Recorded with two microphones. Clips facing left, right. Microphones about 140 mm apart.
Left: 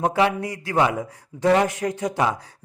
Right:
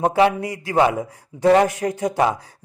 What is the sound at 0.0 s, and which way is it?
A man's voice, 30° right (ahead or behind).